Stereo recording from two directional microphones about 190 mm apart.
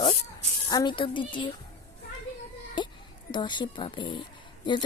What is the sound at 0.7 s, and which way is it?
Speech, 20° left (ahead or behind).